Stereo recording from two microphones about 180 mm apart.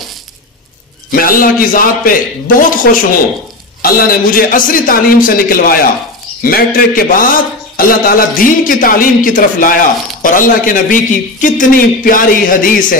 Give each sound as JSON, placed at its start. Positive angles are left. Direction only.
{"t": 1.1, "sound": "a man's voice", "side_deg": 50}